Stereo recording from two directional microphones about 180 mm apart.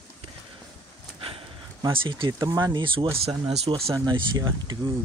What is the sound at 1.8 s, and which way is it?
Speech, 25° right (ahead or behind).